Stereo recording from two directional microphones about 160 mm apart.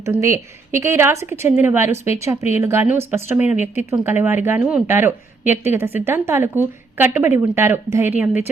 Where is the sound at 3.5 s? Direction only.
45° left (ahead or behind).